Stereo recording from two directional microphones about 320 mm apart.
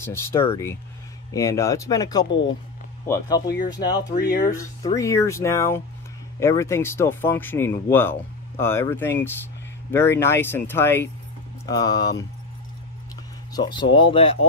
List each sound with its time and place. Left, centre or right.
0.0 s speech: centre
3.4 s speech: left
3.7 s speech: centre
4.2 s speech: left
4.5 s speech: centre
13.5 s speech: centre